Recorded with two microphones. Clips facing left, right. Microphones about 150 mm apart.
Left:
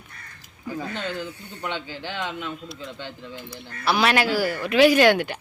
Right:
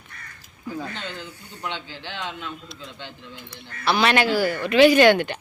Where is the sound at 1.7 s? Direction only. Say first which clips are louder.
Left 3 dB; 45° left (ahead or behind).